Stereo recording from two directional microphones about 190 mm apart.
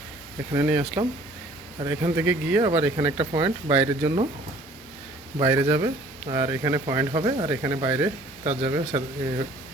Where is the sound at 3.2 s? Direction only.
30° right (ahead or behind).